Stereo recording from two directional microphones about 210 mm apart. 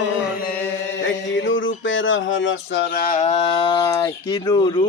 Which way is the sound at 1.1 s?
60° left (ahead or behind).